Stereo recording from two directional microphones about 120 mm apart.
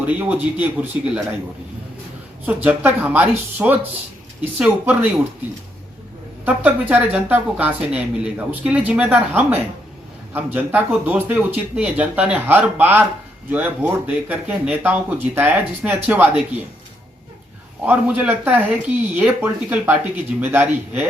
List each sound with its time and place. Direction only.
0.1 s speech: 15° right (ahead or behind)
2.5 s speech: 15° right (ahead or behind)
6.4 s speech: 15° right (ahead or behind)
17.8 s speech: 15° right (ahead or behind)